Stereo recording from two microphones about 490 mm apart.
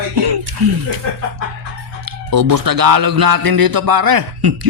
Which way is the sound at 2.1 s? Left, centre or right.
Right.